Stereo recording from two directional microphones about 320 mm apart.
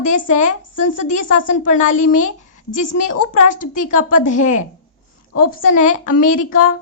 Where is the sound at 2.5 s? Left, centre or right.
Left.